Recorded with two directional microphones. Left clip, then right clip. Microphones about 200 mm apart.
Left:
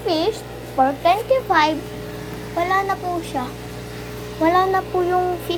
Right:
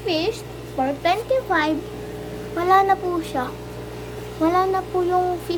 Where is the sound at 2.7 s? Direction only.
35° right (ahead or behind).